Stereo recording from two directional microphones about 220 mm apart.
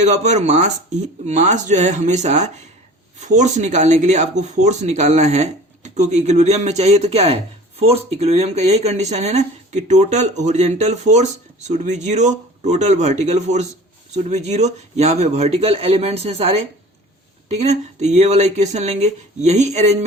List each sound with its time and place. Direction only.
0.0 s speech: 30° right (ahead or behind)